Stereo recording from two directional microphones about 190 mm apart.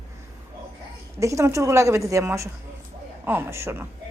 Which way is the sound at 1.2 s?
15° right (ahead or behind).